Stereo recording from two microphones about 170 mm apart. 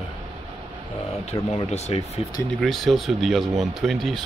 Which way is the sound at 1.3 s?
35° left (ahead or behind).